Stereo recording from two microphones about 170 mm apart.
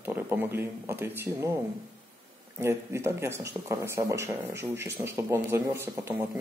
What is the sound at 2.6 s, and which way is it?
Speech, 15° right (ahead or behind).